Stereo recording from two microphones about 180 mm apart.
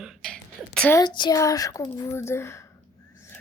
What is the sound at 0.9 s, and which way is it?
Speech, 25° left (ahead or behind).